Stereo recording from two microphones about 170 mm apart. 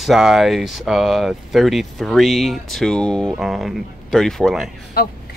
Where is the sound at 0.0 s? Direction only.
Centre (ahead or behind).